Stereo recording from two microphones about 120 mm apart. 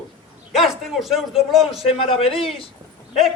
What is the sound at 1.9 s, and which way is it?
Speech, 55° left (ahead or behind).